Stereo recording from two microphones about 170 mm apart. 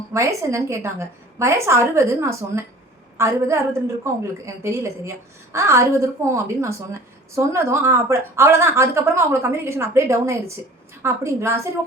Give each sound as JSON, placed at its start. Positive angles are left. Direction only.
{"t": 0.1, "sound": "a woman's voice", "side_deg": -15}